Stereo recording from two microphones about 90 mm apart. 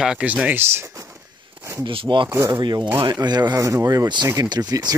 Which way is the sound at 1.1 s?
30° right (ahead or behind).